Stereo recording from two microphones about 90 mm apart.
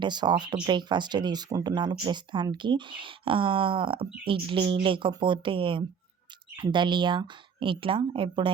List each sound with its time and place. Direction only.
0.0 s speech: 55° right (ahead or behind); by 8.5 s 70° right (ahead or behind)